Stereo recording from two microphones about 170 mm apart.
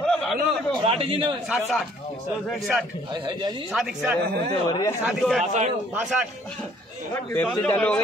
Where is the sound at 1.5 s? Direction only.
Centre (ahead or behind).